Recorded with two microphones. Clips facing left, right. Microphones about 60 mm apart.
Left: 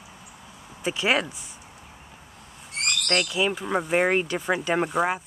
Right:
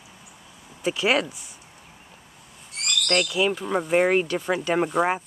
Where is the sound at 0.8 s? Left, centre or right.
Centre.